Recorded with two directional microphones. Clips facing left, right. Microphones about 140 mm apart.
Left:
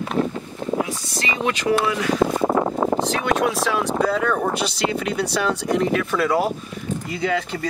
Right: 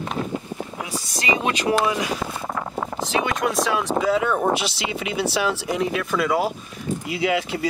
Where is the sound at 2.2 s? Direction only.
35° left (ahead or behind).